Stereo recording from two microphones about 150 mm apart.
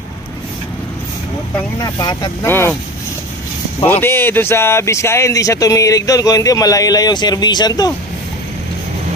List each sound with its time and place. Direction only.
1.8 s speech: 25° left (ahead or behind)
2.4 s speech: 15° left (ahead or behind)
3.8 s speech: 15° left (ahead or behind)